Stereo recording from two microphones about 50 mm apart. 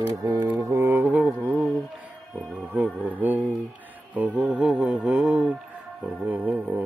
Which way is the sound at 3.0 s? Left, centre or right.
Right.